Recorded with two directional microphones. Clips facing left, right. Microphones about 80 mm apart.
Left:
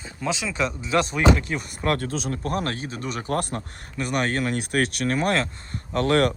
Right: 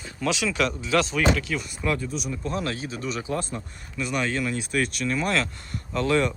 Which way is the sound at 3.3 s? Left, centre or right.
Left.